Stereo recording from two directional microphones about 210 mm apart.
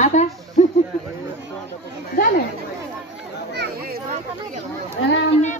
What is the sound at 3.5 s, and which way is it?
Speech, 50° right (ahead or behind).